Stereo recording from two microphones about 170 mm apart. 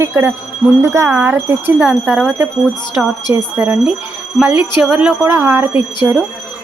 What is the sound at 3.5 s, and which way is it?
Speech, 10° right (ahead or behind).